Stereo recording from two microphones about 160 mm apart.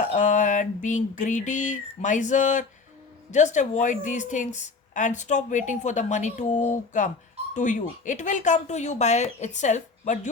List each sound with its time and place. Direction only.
0.0 s a woman's voice: 50° left (ahead or behind)